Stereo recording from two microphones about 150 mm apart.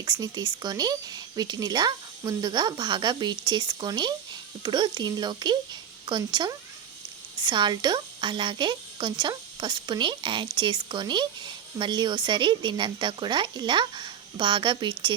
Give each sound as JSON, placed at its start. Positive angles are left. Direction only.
{"t": 0.0, "sound": "speech", "side_deg": -25}